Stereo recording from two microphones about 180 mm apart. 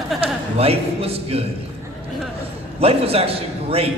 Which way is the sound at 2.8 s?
35° right (ahead or behind).